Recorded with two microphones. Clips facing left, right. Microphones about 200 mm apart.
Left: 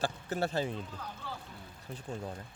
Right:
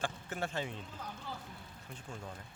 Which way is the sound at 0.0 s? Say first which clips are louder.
Left 5 dB; 35° left (ahead or behind).